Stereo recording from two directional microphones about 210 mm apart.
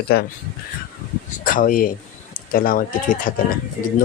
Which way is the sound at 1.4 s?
40° left (ahead or behind).